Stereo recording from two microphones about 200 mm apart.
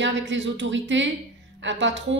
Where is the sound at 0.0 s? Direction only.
65° right (ahead or behind).